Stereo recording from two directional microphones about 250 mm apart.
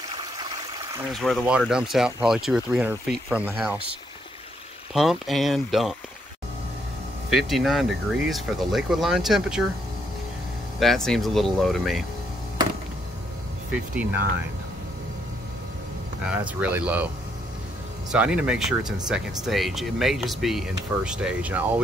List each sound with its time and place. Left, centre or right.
0.2 s a sound: centre
1.1 s speech: centre
4.9 s speech: centre
7.2 s speech: centre
10.8 s speech: centre
13.7 s speech: centre
16.5 s speech: centre
18.1 s speech: centre